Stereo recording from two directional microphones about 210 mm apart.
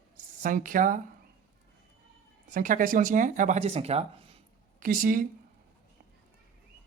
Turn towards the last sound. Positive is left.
turn(degrees=-40)  # may be behind; listen again after turning